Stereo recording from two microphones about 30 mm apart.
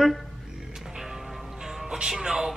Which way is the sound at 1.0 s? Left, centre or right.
Centre.